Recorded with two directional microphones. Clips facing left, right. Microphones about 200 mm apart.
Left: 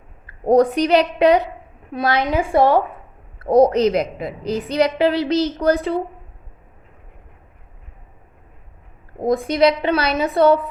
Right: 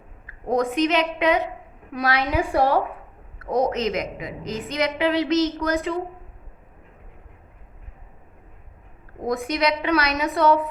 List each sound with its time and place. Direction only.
0.4 s a woman's voice: 35° left (ahead or behind)
9.2 s a woman's voice: 30° left (ahead or behind)